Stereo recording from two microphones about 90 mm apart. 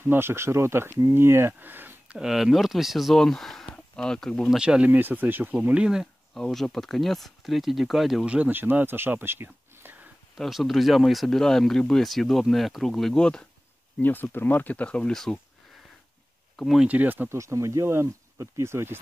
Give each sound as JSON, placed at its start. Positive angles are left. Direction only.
{"t": 0.0, "sound": "speech", "side_deg": -25}
{"t": 2.1, "sound": "speech", "side_deg": -5}
{"t": 4.5, "sound": "speech", "side_deg": -10}
{"t": 6.3, "sound": "speech", "side_deg": 5}
{"t": 8.3, "sound": "speech", "side_deg": -15}
{"t": 10.3, "sound": "speech", "side_deg": 0}
{"t": 14.0, "sound": "speech", "side_deg": 20}
{"t": 16.5, "sound": "speech", "side_deg": 0}
{"t": 16.8, "sound": "speech", "side_deg": -15}
{"t": 17.3, "sound": "speech", "side_deg": -35}